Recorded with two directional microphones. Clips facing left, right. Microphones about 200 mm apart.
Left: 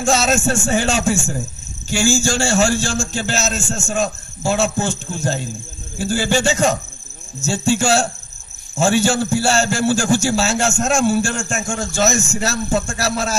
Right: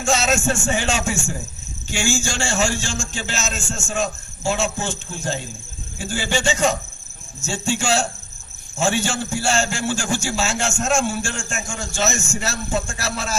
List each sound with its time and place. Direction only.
0.0 s a man's voice: 40° left (ahead or behind)